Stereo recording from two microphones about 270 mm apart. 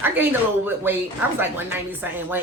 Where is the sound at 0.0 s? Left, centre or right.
Centre.